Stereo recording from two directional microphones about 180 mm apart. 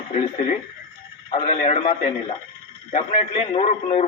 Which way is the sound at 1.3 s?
35° left (ahead or behind).